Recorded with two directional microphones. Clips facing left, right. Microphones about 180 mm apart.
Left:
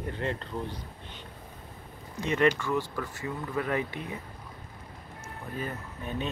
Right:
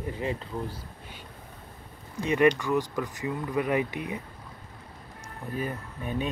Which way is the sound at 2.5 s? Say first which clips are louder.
Right 3 dB; 15° right (ahead or behind).